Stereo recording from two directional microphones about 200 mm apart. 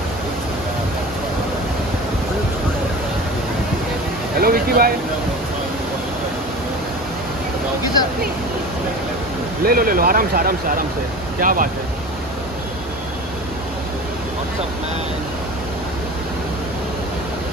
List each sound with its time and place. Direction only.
4.4 s speech: 45° right (ahead or behind)
9.7 s speech: 45° right (ahead or behind)